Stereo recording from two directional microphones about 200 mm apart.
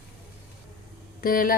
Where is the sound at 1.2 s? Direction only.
45° left (ahead or behind).